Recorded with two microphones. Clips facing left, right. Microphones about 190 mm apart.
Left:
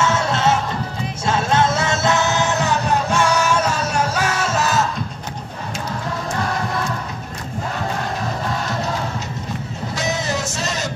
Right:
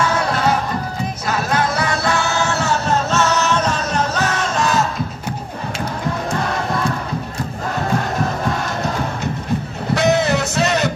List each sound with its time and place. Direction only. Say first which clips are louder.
0.0 s music: even; 25° left (ahead or behind); by 4.8 s 5° left (ahead or behind)
9.9 s music: right 8 dB; 60° right (ahead or behind)